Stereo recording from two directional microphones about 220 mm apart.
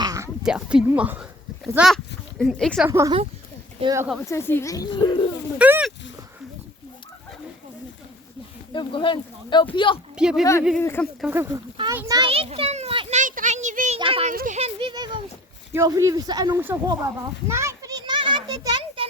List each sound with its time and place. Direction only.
0.0 s a sound: 15° right (ahead or behind)
0.4 s speech: 5° right (ahead or behind)
3.8 s speech: 20° right (ahead or behind)
4.3 s a woman's voice: 10° left (ahead or behind)
5.5 s a sound: 5° right (ahead or behind)
8.7 s speech: 20° left (ahead or behind)
10.2 s speech: 5° right (ahead or behind)
10.8 s a woman's voice: 10° left (ahead or behind)
11.2 s children playing: 10° right (ahead or behind); by 14.3 s 25° right (ahead or behind)
14.3 s speech: 35° right (ahead or behind); by 17.0 s 15° right (ahead or behind)
17.5 s children playing: 10° right (ahead or behind)